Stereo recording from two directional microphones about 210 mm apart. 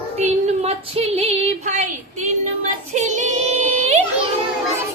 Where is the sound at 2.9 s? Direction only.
35° right (ahead or behind).